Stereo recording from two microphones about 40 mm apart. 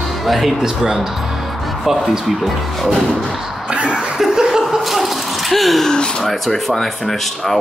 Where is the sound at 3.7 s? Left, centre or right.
Right.